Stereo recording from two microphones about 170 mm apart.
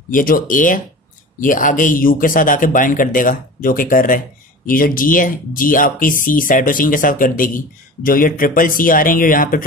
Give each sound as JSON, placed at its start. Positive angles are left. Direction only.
{"t": 0.1, "sound": "a man's voice", "side_deg": 55}